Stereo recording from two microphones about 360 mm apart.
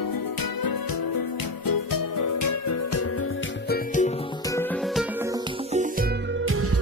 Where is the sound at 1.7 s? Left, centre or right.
Left.